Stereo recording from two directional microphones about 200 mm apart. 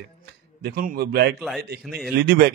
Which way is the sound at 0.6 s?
50° right (ahead or behind).